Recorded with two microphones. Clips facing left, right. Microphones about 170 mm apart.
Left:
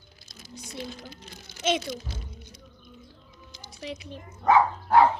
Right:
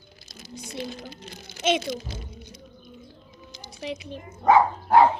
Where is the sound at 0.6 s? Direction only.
60° right (ahead or behind).